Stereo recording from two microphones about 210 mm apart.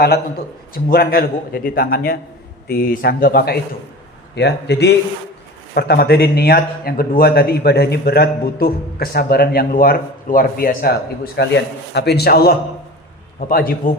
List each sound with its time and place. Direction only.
0.0 s a man's voice: 45° left (ahead or behind)